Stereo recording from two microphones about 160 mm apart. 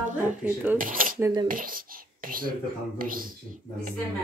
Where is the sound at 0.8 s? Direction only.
60° right (ahead or behind).